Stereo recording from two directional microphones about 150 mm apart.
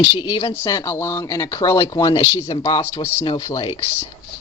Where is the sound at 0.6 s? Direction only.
20° left (ahead or behind).